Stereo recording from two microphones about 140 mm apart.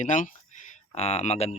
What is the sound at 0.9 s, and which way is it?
Speech, 45° left (ahead or behind).